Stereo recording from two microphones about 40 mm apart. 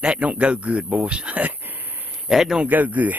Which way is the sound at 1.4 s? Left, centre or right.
Right.